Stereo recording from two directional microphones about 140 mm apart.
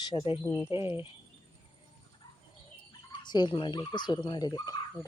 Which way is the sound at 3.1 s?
30° left (ahead or behind).